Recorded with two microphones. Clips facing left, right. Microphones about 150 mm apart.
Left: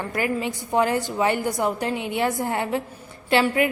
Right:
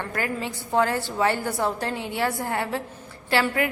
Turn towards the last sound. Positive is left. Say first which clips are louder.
# left 3 dB
turn(degrees=20)  # may be behind; listen again after turning